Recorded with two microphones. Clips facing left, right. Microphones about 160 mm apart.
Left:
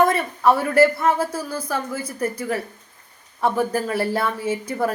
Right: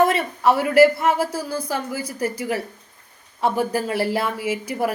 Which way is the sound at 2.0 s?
30° left (ahead or behind).